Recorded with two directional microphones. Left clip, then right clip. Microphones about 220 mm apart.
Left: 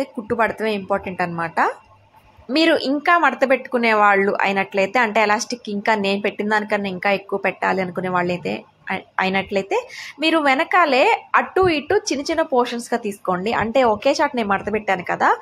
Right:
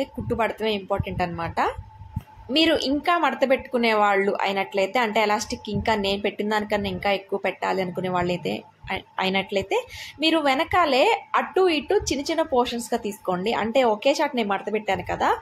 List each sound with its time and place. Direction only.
0.0 s speech: 15° left (ahead or behind)